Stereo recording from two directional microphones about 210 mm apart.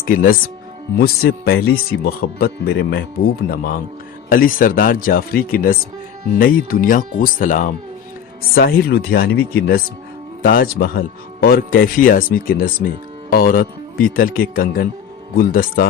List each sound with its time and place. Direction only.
0.0 s speech: 40° left (ahead or behind)